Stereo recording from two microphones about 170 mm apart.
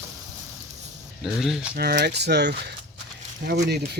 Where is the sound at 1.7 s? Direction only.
75° right (ahead or behind).